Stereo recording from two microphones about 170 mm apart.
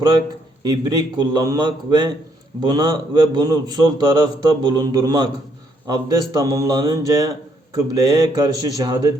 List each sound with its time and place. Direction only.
0.6 s a man's voice: 25° right (ahead or behind)